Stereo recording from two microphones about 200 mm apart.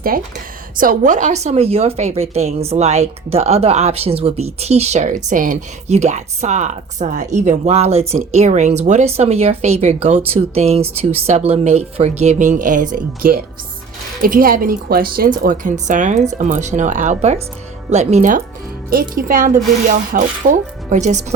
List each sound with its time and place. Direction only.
0.1 s speech: 45° right (ahead or behind)